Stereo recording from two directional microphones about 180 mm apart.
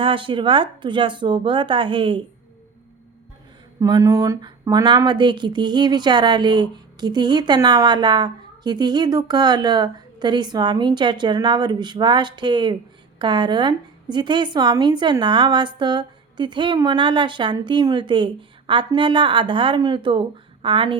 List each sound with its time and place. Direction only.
0.0 s speech: 30° right (ahead or behind)
3.8 s speech: 20° right (ahead or behind)